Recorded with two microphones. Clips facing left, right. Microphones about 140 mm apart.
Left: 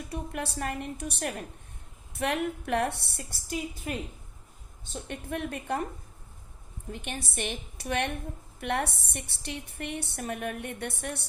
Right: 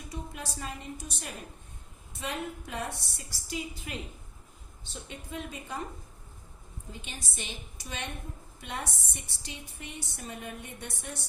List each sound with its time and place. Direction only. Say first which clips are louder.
0.1 s a woman's voice: left 5 dB; 65° left (ahead or behind)
6.9 s a woman's voice: left 8 dB; 60° left (ahead or behind)